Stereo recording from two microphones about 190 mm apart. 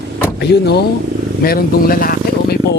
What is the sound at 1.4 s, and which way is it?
Speech, 50° left (ahead or behind).